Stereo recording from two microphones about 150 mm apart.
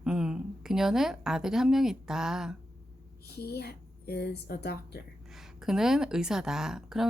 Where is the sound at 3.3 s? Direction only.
90° left.